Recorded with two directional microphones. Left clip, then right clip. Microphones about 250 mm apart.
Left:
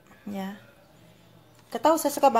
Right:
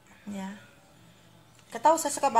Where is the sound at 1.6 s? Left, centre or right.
Left.